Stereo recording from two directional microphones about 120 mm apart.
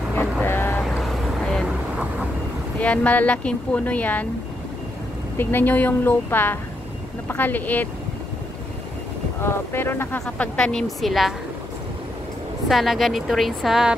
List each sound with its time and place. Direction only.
0.1 s vehicle: 15° left (ahead or behind)
0.8 s vehicle: centre (ahead or behind)
2.8 s speech: 10° left (ahead or behind)
5.4 s speech: 15° left (ahead or behind)
9.4 s speech: 20° left (ahead or behind); by 11.3 s centre (ahead or behind)
12.6 s speech: centre (ahead or behind)